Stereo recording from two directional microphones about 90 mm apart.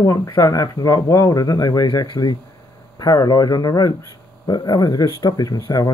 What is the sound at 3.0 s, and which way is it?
Speech, 45° left (ahead or behind).